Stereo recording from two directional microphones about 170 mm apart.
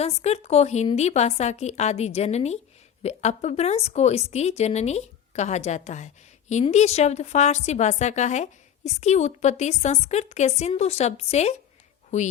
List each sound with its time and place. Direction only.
0.0 s a woman's voice: 40° left (ahead or behind)